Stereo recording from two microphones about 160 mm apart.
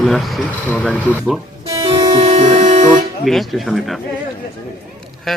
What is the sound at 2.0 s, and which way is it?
Music, 45° right (ahead or behind).